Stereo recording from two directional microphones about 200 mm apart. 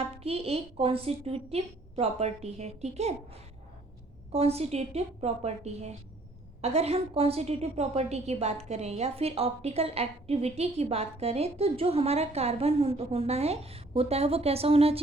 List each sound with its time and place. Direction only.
0.0 s a woman's voice: 30° right (ahead or behind)
4.3 s a woman's voice: 30° right (ahead or behind)